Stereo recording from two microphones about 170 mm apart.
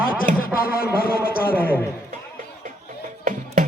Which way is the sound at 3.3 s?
50° right (ahead or behind).